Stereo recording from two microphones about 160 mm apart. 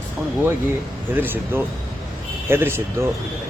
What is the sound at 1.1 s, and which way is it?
Speech, 15° right (ahead or behind).